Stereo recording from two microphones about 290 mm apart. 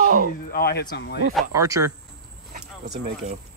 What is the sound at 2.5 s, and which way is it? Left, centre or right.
Speech, right.